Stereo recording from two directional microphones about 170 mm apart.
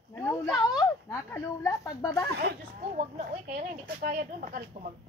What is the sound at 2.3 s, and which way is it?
Speech, 75° right (ahead or behind).